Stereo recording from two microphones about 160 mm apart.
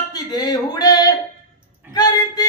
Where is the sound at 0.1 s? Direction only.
25° left (ahead or behind).